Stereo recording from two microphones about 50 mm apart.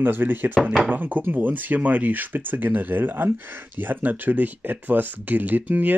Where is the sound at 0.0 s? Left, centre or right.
Right.